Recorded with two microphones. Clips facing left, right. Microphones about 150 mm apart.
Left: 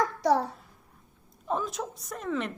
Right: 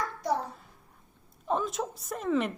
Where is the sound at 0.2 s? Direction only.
90° left.